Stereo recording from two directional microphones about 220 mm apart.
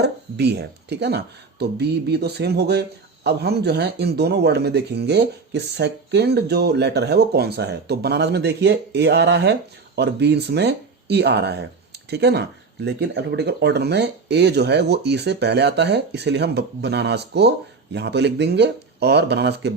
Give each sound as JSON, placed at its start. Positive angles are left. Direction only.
{"t": 0.0, "sound": "speech", "side_deg": -50}